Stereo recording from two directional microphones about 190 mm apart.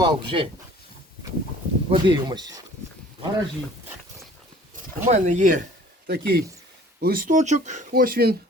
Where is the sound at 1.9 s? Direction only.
25° right (ahead or behind).